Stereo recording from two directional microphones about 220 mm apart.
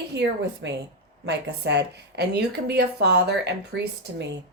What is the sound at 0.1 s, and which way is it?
A woman's voice, 50° right (ahead or behind).